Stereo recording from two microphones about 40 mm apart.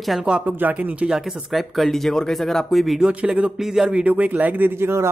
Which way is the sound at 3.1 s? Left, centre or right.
Right.